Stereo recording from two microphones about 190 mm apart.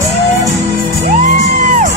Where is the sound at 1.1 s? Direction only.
40° right (ahead or behind).